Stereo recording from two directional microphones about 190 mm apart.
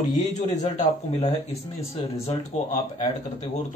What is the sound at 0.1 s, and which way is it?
Speech, 40° left (ahead or behind).